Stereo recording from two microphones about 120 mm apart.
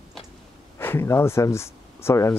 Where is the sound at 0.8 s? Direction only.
20° left (ahead or behind).